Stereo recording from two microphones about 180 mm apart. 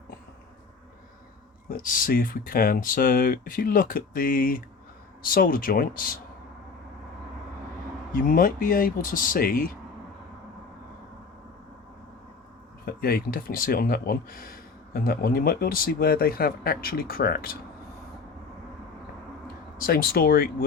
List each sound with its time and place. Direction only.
1.7 s speech: 50° left (ahead or behind)
8.1 s speech: 50° left (ahead or behind)
12.8 s speech: 55° left (ahead or behind)
19.8 s speech: 55° left (ahead or behind)